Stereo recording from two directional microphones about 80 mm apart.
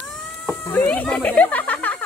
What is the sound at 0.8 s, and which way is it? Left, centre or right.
Speech, centre.